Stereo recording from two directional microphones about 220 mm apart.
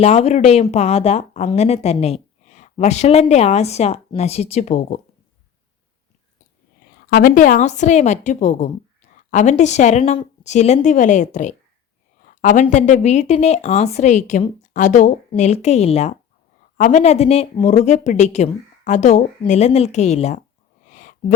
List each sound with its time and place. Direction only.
0.0 s a woman's voice: 30° left (ahead or behind)
7.1 s a woman's voice: 40° left (ahead or behind)
20.9 s a sound: 35° left (ahead or behind)